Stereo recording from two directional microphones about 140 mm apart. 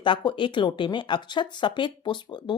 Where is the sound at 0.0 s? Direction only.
35° left (ahead or behind).